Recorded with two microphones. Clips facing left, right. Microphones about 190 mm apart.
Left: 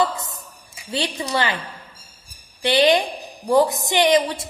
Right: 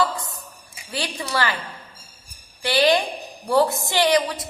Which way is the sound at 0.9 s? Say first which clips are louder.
Left 4 dB; 20° left (ahead or behind).